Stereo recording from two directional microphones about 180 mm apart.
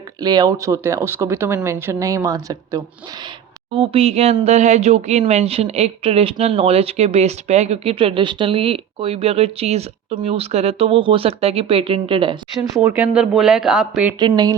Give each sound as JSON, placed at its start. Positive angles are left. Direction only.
{"t": 0.2, "sound": "speech", "side_deg": -20}
{"t": 3.8, "sound": "speech", "side_deg": -35}
{"t": 12.7, "sound": "speech", "side_deg": -15}
{"t": 14.2, "sound": "speech", "side_deg": -25}